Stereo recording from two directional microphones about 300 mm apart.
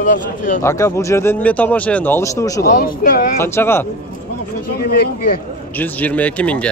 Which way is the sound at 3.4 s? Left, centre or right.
Centre.